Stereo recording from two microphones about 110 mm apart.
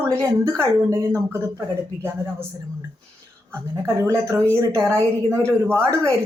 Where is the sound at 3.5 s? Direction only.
25° right (ahead or behind).